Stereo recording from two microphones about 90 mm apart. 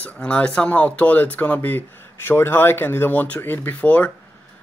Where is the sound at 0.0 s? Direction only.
15° left (ahead or behind).